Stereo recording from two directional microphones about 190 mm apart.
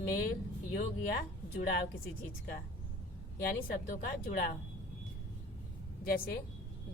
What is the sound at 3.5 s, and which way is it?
A woman's voice, 45° left (ahead or behind).